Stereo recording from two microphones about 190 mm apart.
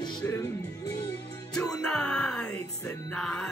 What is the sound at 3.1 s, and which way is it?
Speech, 5° left (ahead or behind).